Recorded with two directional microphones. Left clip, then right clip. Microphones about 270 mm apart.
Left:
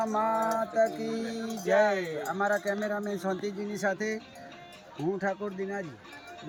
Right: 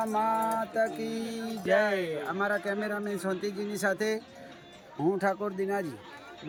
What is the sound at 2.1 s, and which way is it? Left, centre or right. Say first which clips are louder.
Speech: left 1 dB; centre.